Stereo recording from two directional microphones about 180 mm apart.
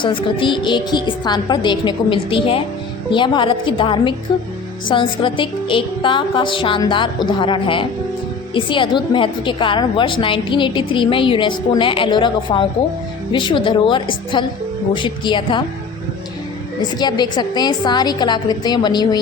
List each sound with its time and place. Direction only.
0.0 s a woman's voice: 30° left (ahead or behind)
17.0 s a woman's voice: 25° left (ahead or behind)